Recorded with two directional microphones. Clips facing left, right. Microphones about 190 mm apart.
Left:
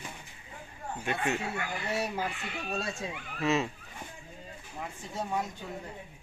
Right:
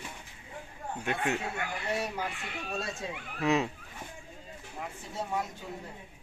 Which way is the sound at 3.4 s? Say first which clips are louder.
Right 1 dB; 15° right (ahead or behind).